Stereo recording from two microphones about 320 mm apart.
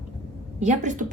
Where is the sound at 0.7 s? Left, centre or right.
Right.